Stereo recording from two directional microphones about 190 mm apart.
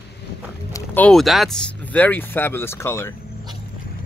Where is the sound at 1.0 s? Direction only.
Centre (ahead or behind).